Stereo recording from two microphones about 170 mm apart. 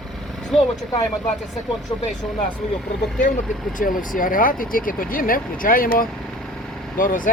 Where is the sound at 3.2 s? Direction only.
50° left (ahead or behind).